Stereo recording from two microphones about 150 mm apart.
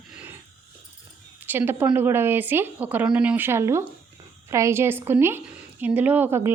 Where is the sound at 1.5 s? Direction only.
15° right (ahead or behind).